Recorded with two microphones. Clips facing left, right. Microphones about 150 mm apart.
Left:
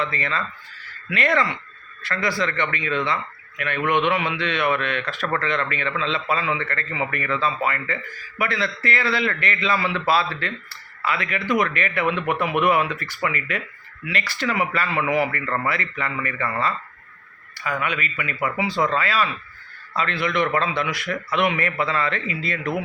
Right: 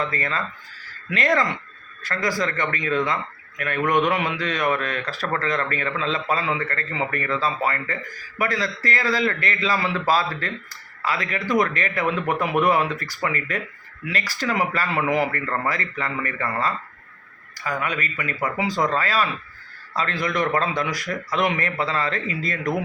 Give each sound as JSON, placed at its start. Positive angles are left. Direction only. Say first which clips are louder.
{"t": 0.0, "sound": "a man's voice", "louder": "even", "side_deg": -40}